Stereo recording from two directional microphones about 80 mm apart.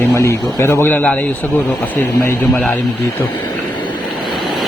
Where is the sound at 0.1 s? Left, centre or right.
Left.